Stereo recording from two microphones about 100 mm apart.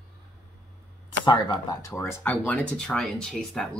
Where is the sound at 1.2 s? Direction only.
45° left (ahead or behind).